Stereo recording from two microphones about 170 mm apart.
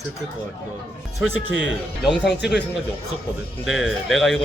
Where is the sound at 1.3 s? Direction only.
90° left.